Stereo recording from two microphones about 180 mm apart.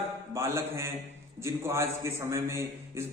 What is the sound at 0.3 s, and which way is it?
A man's voice, 15° right (ahead or behind).